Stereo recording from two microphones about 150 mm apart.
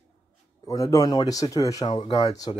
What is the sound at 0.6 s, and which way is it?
Speech, 20° left (ahead or behind).